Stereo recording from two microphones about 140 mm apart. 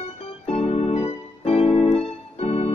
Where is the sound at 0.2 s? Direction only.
50° left (ahead or behind).